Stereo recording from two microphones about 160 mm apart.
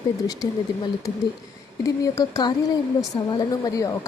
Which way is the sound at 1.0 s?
20° left (ahead or behind).